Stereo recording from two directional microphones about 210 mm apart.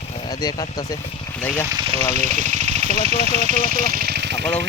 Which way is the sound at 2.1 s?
35° right (ahead or behind).